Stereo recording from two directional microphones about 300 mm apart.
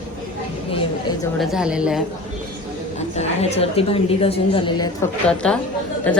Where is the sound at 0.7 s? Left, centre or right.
Centre.